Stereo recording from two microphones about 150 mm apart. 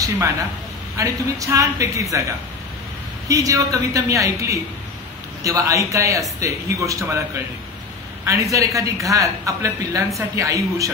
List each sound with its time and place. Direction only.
0.9 s a woman's voice: 20° right (ahead or behind)
3.3 s a woman's voice: 20° right (ahead or behind)
8.3 s a woman's voice: 20° right (ahead or behind)